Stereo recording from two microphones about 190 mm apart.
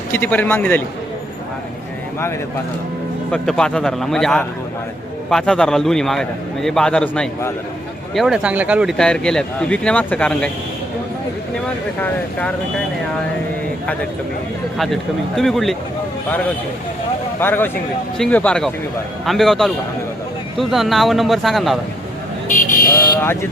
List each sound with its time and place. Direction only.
0.1 s speech: 10° left (ahead or behind)
3.3 s speech: 5° left (ahead or behind)
11.5 s speech: 10° left (ahead or behind)
15.4 s speech: centre (ahead or behind)
17.4 s speech: 10° left (ahead or behind)
22.4 s vehicle: 45° left (ahead or behind)
23.0 s speech: 15° left (ahead or behind)